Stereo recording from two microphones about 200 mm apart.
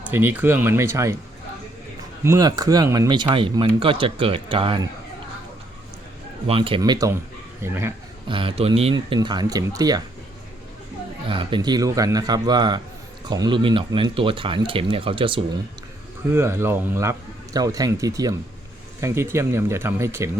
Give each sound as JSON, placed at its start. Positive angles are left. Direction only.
{"t": 0.0, "sound": "a man's voice", "side_deg": -10}
{"t": 2.2, "sound": "speech", "side_deg": -15}
{"t": 6.5, "sound": "a man's voice", "side_deg": -25}
{"t": 8.3, "sound": "speech", "side_deg": -25}
{"t": 11.3, "sound": "speech", "side_deg": -25}
{"t": 16.3, "sound": "a man's voice", "side_deg": -15}